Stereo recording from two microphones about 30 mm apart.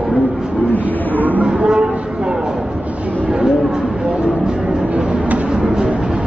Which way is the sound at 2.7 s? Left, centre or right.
Right.